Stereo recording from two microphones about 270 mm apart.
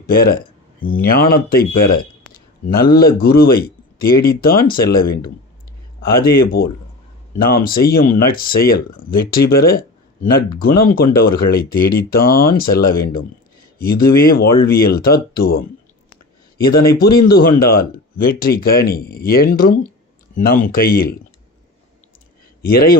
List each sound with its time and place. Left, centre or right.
0.1 s speech: left
22.6 s speech: left